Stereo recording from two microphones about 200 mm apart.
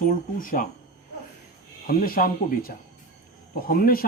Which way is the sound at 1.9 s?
45° left (ahead or behind).